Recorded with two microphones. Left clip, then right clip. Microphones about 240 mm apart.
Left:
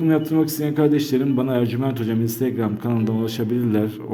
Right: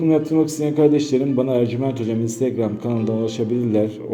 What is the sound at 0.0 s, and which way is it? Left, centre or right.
A man's voice, centre.